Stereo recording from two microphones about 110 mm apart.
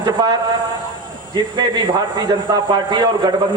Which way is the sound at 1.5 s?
40° right (ahead or behind).